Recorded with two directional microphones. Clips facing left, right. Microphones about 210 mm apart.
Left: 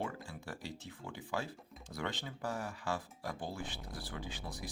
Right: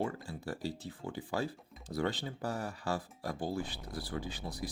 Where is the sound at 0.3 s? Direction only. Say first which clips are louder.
Right 6 dB; 35° right (ahead or behind).